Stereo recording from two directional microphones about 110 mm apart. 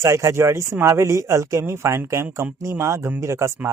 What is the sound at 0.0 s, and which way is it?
Speech, 25° right (ahead or behind).